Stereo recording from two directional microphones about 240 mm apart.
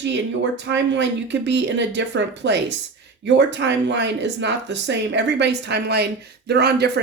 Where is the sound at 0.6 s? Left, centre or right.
Right.